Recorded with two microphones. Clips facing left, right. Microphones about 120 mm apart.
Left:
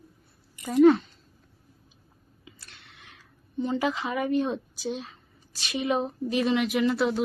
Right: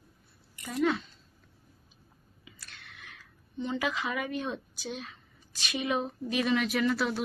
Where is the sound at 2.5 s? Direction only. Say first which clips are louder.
Even; 25° left (ahead or behind).